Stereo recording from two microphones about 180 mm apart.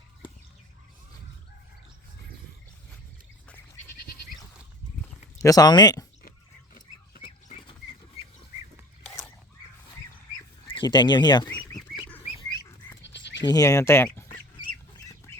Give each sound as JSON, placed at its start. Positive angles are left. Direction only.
{"t": 5.4, "sound": "speech", "side_deg": 20}
{"t": 6.7, "sound": "pig", "side_deg": 50}
{"t": 10.7, "sound": "speech", "side_deg": 25}
{"t": 13.0, "sound": "bleat", "side_deg": 75}
{"t": 13.5, "sound": "speech", "side_deg": 20}
{"t": 15.3, "sound": "bird", "side_deg": 15}